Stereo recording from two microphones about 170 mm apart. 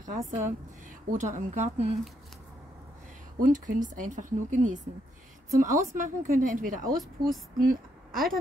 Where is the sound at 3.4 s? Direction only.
50° right (ahead or behind).